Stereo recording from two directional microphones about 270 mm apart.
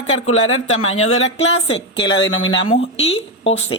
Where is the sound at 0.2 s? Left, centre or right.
Left.